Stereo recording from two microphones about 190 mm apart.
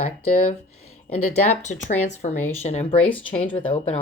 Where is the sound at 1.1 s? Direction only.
40° left (ahead or behind).